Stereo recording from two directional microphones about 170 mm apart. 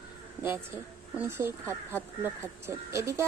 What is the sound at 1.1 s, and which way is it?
A woman's voice, 15° right (ahead or behind).